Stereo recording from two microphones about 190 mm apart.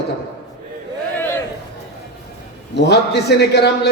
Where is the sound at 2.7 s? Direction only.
60° left (ahead or behind).